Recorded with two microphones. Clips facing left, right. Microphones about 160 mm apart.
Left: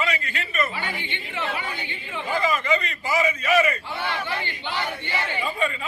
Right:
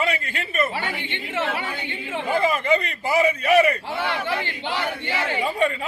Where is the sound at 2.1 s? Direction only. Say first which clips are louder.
Right 3 dB; 55° right (ahead or behind).